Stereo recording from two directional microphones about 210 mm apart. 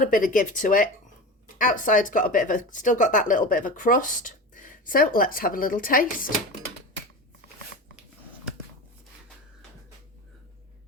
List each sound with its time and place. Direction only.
0.0 s speech: 40° left (ahead or behind)